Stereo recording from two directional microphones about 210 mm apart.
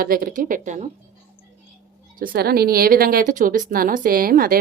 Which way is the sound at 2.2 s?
45° right (ahead or behind).